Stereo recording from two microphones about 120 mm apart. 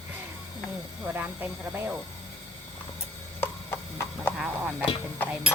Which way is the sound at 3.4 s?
20° left (ahead or behind).